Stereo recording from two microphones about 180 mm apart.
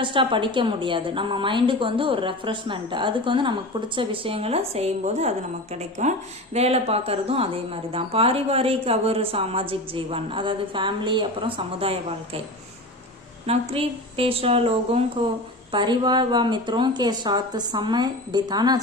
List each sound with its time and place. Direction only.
0.0 s a woman's voice: 25° right (ahead or behind)
13.5 s a woman's voice: 30° right (ahead or behind)